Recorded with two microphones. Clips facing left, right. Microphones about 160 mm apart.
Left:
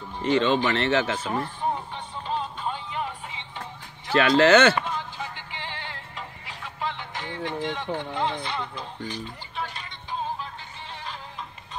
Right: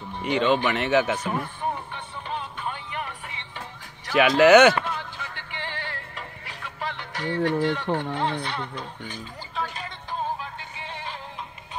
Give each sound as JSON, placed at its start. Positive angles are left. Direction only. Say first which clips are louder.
{"t": 0.2, "sound": "speech", "louder": "even", "side_deg": -15}
{"t": 1.9, "sound": "music", "louder": "left 2 dB", "side_deg": -60}
{"t": 4.1, "sound": "speech", "louder": "right 2 dB", "side_deg": -15}
{"t": 4.8, "sound": "music", "louder": "left 1 dB", "side_deg": -55}
{"t": 6.6, "sound": "speech", "louder": "left 1 dB", "side_deg": -60}